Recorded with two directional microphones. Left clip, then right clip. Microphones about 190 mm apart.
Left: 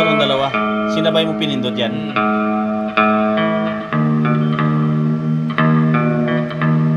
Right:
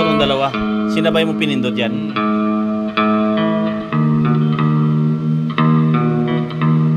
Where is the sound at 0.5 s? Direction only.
70° right (ahead or behind).